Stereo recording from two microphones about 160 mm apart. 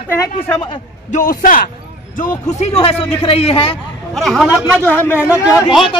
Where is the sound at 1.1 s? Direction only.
60° left (ahead or behind); by 3.6 s 35° left (ahead or behind).